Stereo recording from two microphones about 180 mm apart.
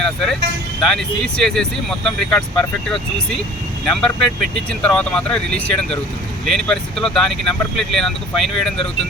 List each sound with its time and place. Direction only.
0.0 s speech: 5° left (ahead or behind)